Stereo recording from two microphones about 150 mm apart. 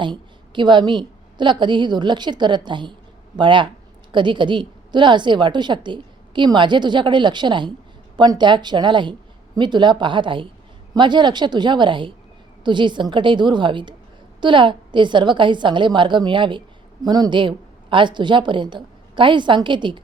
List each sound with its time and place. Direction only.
0.0 s a woman's voice: 30° right (ahead or behind)